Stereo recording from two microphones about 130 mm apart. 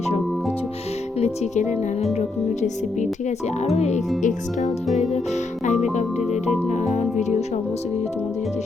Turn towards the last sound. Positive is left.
turn(degrees=60)  # may be behind; listen again after turning